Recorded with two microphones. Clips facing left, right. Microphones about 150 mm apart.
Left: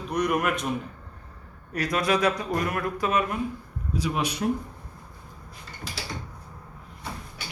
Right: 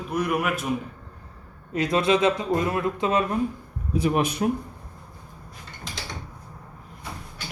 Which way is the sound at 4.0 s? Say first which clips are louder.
Right 5 dB; 50° right (ahead or behind).